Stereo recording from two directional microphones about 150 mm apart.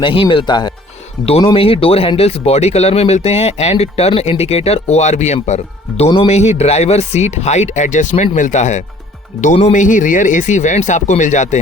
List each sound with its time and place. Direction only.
0.0 s speech: 35° left (ahead or behind)
1.2 s speech: 40° left (ahead or behind)